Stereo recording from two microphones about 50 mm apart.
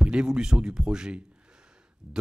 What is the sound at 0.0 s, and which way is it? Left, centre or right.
Speech, centre.